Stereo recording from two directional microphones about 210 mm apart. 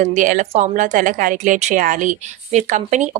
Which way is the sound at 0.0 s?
35° right (ahead or behind).